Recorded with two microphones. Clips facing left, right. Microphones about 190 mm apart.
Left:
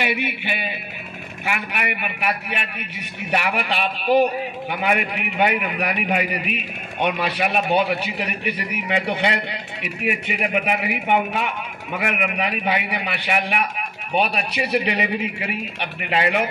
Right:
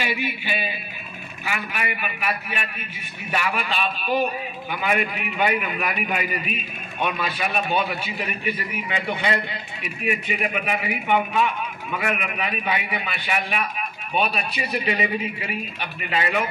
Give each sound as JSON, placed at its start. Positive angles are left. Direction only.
{"t": 0.0, "sound": "a man's voice", "side_deg": 60}